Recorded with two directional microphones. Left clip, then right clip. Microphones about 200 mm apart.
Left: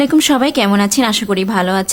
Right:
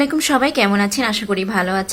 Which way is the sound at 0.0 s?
35° left (ahead or behind).